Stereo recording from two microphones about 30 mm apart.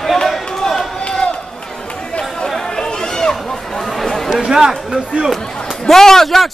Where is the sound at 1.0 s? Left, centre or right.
Left.